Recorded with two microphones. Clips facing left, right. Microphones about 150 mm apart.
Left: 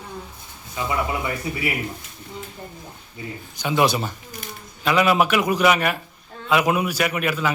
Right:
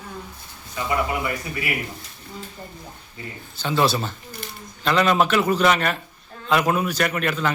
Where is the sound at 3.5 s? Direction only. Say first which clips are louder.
Left 1 dB; 15° left (ahead or behind).